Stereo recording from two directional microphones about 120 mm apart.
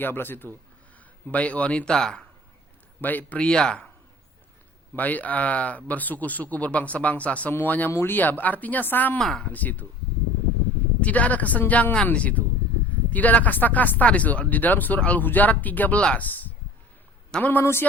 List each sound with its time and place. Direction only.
0.0 s speech: 15° left (ahead or behind)
4.9 s speech: 15° left (ahead or behind)
9.2 s speech: 5° left (ahead or behind)
9.5 s speech: 15° left (ahead or behind)
11.0 s speech: 10° left (ahead or behind)